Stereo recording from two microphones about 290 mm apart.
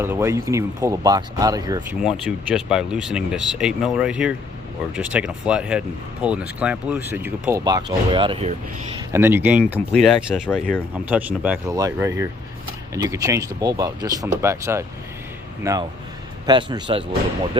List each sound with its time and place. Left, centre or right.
0.0 s speech: centre
2.0 s speech: centre
9.1 s speech: centre